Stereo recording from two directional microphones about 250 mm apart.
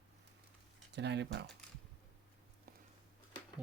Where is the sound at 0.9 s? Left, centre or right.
Right.